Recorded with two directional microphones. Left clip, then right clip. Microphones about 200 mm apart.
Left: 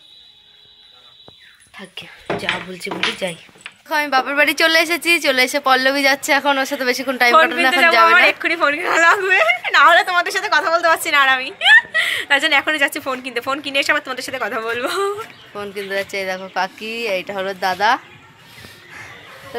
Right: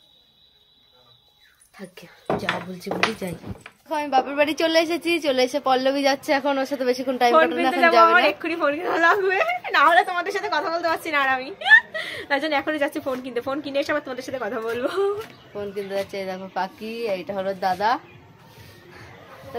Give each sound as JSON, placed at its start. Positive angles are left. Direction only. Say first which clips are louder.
{"t": 1.8, "sound": "a woman's voice", "louder": "left 8 dB", "side_deg": -5}
{"t": 8.1, "sound": "a woman's voice", "louder": "left 6 dB", "side_deg": -20}
{"t": 15.5, "sound": "speech", "louder": "left 4 dB", "side_deg": 15}